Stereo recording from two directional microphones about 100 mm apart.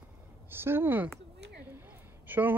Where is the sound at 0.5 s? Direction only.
20° right (ahead or behind).